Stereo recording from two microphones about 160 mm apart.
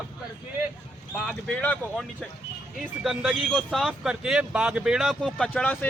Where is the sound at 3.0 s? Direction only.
5° right (ahead or behind).